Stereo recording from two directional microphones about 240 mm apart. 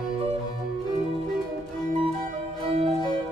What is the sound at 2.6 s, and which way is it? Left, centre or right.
Music, right.